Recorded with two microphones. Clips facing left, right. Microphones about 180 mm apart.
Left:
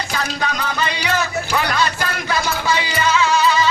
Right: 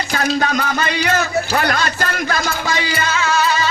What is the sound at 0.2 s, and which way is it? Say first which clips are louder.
Speech: right 6 dB; 45° right (ahead or behind).